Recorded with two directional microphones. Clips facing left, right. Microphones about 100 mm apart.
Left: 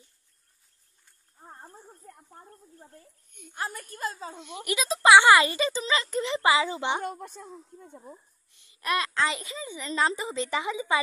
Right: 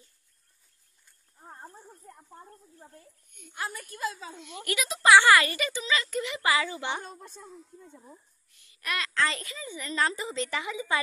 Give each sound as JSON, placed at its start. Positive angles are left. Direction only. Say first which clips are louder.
{"t": 3.3, "sound": "a woman's voice", "louder": "left 2 dB", "side_deg": 35}
{"t": 4.3, "sound": "a woman's voice", "louder": "left 2 dB", "side_deg": 20}
{"t": 7.0, "sound": "a woman's voice", "louder": "left 8 dB", "side_deg": 60}
{"t": 8.0, "sound": "a woman's voice", "louder": "left 5 dB", "side_deg": 20}